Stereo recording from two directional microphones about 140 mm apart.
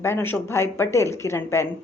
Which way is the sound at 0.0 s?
15° left (ahead or behind).